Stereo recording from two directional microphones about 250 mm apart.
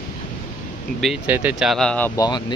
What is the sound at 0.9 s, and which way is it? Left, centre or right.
Speech, centre.